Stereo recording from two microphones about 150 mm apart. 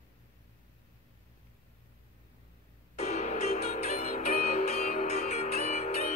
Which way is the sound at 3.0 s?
50° left (ahead or behind).